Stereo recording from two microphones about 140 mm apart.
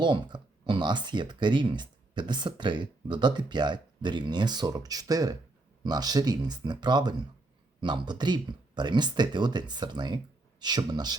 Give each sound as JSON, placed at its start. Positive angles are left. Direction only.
{"t": 0.0, "sound": "speech", "side_deg": -35}